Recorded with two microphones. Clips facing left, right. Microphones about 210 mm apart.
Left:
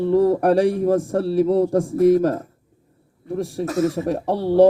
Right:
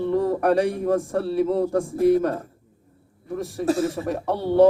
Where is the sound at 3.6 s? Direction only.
30° right (ahead or behind).